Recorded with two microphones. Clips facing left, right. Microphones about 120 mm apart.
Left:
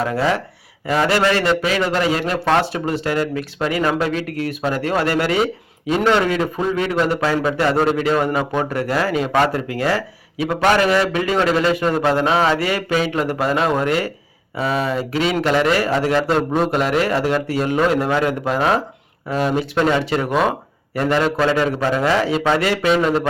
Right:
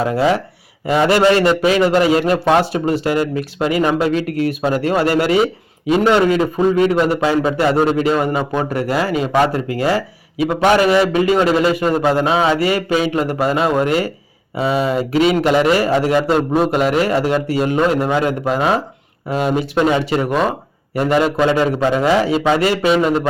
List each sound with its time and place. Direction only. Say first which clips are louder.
0.1 s a man's voice: right 4 dB; 15° right (ahead or behind)
7.2 s a man's voice: right 3 dB; 15° right (ahead or behind)
7.5 s a man's voice: right 2 dB; centre (ahead or behind)
22.2 s a man's voice: right 3 dB; 5° right (ahead or behind)